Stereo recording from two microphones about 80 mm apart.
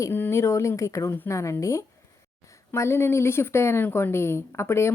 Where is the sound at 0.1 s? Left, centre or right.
Left.